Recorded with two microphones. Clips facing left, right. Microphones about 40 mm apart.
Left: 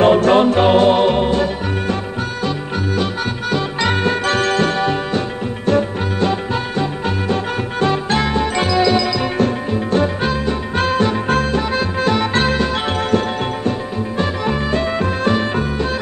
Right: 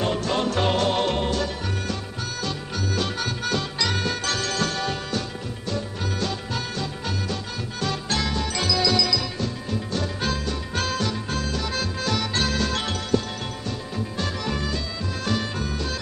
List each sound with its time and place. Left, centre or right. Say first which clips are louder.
0.0 s music: left 13 dB; left
0.5 s music: left 10 dB; left
3.0 s music: left 6 dB; centre
3.8 s music: left 11 dB; left
11.2 s music: left 11 dB; left
11.7 s accordion: left 9 dB; left
13.7 s music: left 10 dB; left